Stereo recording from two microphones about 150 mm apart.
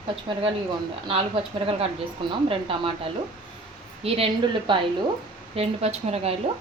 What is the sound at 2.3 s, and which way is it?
Speech, 35° right (ahead or behind).